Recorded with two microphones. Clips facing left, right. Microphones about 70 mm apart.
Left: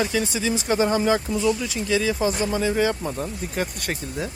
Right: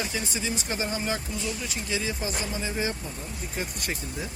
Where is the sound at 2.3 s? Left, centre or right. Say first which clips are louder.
Left 9 dB; left.